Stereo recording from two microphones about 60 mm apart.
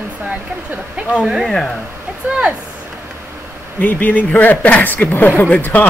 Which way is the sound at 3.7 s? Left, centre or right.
Left.